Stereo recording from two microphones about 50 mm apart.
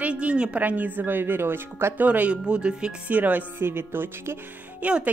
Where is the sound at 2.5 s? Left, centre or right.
Centre.